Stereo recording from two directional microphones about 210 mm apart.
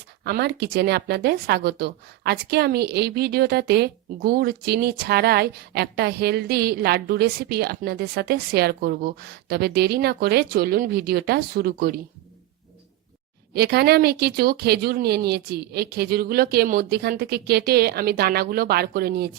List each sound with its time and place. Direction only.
0.3 s a woman's voice: 50° right (ahead or behind)
13.5 s a woman's voice: 50° right (ahead or behind)